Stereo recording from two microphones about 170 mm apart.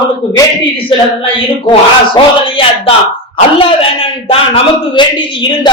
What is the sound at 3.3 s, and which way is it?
A man's voice, 30° left (ahead or behind).